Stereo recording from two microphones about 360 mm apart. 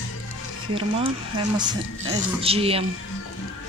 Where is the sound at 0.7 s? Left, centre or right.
Centre.